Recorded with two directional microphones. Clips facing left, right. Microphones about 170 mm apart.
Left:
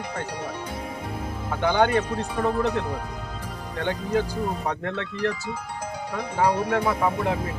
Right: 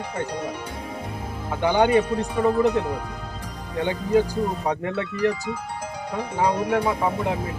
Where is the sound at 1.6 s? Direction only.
10° right (ahead or behind).